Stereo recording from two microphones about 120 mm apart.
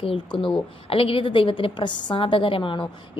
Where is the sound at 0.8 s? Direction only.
50° left (ahead or behind).